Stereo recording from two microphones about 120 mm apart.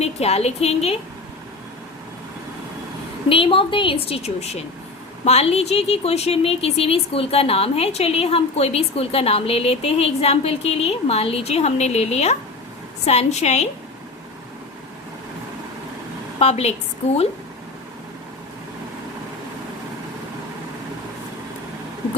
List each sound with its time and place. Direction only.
0.0 s a woman's voice: 60° left (ahead or behind)
3.2 s a woman's voice: 50° left (ahead or behind); by 13.7 s 65° left (ahead or behind)
16.4 s a woman's voice: 60° left (ahead or behind)